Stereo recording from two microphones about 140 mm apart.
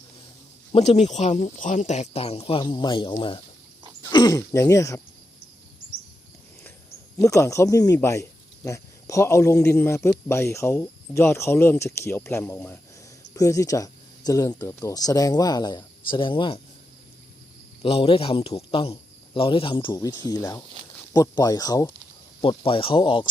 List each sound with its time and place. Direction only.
0.7 s speech: 50° left (ahead or behind)
4.1 s speech: 30° left (ahead or behind)
7.2 s speech: 20° left (ahead or behind); by 16.6 s 35° left (ahead or behind)
17.8 s speech: 45° left (ahead or behind)
19.9 s speech: 25° left (ahead or behind)
22.4 s speech: 40° left (ahead or behind)